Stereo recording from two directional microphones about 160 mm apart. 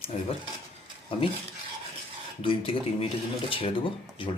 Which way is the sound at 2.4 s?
35° left (ahead or behind).